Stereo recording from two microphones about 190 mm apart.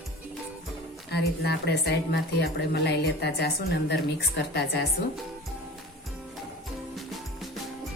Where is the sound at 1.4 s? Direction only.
60° left (ahead or behind).